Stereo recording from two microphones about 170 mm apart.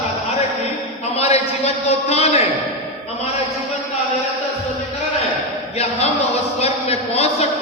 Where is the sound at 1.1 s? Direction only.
35° left (ahead or behind).